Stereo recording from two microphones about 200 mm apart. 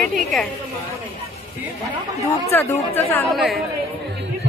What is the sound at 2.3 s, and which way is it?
Speech, 10° left (ahead or behind).